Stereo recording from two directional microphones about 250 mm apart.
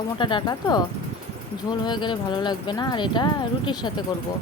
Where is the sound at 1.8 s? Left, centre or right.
Centre.